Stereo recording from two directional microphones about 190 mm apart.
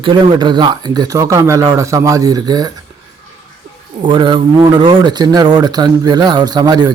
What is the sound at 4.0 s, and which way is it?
A man's voice, 25° right (ahead or behind).